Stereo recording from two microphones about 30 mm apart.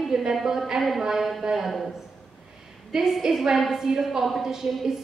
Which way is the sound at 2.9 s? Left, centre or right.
Centre.